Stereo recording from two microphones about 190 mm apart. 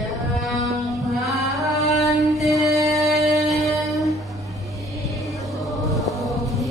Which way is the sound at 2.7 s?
15° right (ahead or behind).